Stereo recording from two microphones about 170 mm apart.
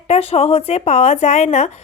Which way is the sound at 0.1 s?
35° left (ahead or behind).